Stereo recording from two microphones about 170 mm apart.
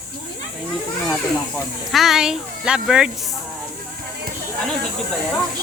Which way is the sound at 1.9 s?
Centre (ahead or behind).